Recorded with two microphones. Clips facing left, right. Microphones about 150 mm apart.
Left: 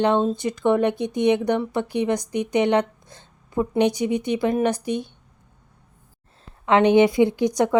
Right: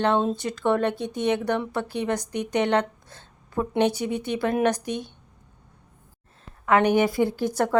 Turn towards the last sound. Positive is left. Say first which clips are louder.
# left 5 dB
turn(degrees=20)  # may be behind; listen again after turning